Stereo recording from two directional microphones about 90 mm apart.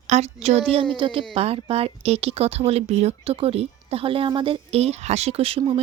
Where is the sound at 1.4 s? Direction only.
90° right; by 4.6 s 70° right (ahead or behind).